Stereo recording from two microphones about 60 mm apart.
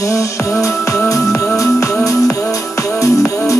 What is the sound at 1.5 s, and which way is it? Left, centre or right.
Music, left.